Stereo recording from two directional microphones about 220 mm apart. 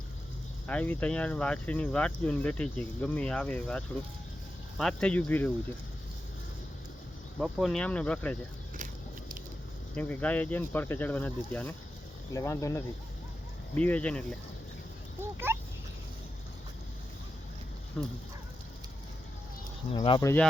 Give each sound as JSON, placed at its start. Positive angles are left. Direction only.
{"t": 0.7, "sound": "speech", "side_deg": 5}
{"t": 7.3, "sound": "speech", "side_deg": 0}
{"t": 9.9, "sound": "speech", "side_deg": 5}
{"t": 15.2, "sound": "a sound", "side_deg": -10}
{"t": 18.0, "sound": "speech", "side_deg": 5}
{"t": 19.9, "sound": "speech", "side_deg": 20}